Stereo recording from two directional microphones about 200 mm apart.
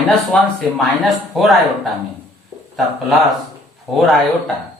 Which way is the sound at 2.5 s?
20° right (ahead or behind).